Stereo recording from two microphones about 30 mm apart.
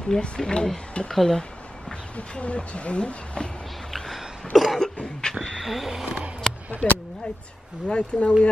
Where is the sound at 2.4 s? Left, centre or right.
Left.